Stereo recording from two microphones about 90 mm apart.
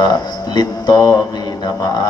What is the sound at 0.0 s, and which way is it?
Mantra, 50° left (ahead or behind).